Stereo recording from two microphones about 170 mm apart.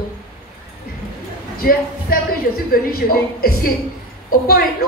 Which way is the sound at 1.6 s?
60° left (ahead or behind).